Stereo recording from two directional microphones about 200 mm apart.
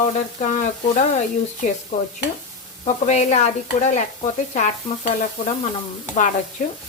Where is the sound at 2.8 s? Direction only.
35° left (ahead or behind).